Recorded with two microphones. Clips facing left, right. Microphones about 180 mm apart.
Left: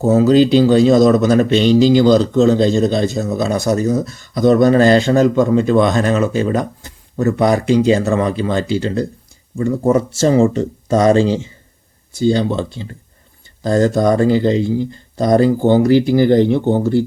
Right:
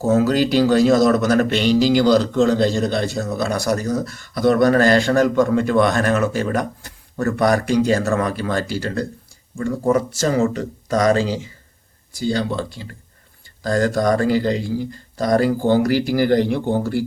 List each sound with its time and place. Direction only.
0.0 s speech: 20° left (ahead or behind)